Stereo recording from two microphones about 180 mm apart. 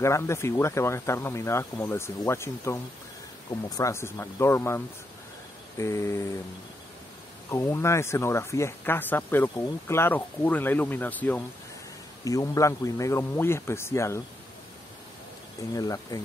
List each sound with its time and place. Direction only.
0.0 s speech: 15° left (ahead or behind)
7.4 s speech: 15° left (ahead or behind)
15.7 s speech: 20° left (ahead or behind)